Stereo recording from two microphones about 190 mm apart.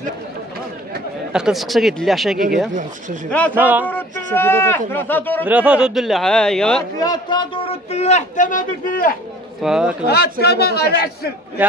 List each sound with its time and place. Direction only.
1.3 s a man's voice: centre (ahead or behind)
3.5 s speech: 10° right (ahead or behind)
3.8 s speech: 10° left (ahead or behind)
5.4 s a man's voice: 5° right (ahead or behind)
7.0 s a man's voice: 20° left (ahead or behind); by 9.1 s 45° left (ahead or behind)
9.6 s a man's voice: 5° right (ahead or behind)
10.0 s a man's voice: 55° left (ahead or behind)